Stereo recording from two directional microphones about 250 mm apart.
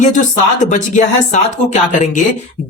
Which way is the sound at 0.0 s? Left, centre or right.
Left.